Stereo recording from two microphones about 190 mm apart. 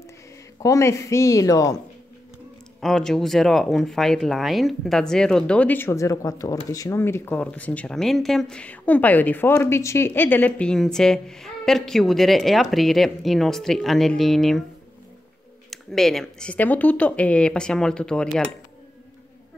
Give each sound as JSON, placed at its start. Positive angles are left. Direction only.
{"t": 0.6, "sound": "speech", "side_deg": 15}
{"t": 2.8, "sound": "speech", "side_deg": 0}
{"t": 15.7, "sound": "speech", "side_deg": 0}